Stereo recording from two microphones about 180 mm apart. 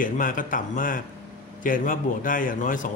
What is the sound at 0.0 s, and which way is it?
A man's voice, 50° left (ahead or behind).